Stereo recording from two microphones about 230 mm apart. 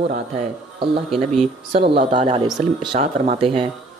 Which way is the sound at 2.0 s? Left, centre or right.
Right.